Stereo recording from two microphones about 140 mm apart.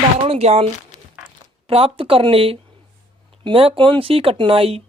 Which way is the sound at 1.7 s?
40° right (ahead or behind).